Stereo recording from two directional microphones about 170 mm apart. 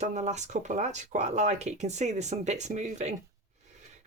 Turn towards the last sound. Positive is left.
turn(degrees=-40)  # may be behind; listen again after turning